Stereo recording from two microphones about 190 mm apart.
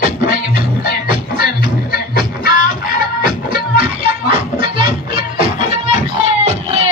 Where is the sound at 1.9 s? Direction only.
55° left (ahead or behind).